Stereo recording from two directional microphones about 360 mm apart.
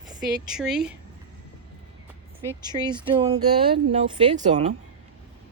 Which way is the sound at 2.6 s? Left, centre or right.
Centre.